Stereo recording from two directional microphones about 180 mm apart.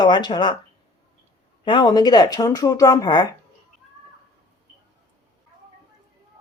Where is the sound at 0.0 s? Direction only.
25° left (ahead or behind).